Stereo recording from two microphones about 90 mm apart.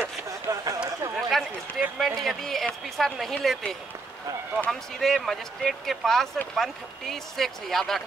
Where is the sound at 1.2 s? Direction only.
Centre (ahead or behind).